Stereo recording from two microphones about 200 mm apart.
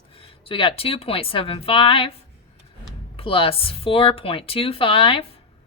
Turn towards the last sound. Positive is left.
turn(degrees=25)  # may be behind; listen again after turning